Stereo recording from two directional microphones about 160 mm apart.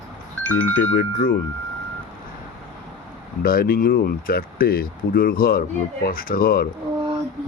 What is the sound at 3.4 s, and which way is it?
Speech, 70° left (ahead or behind).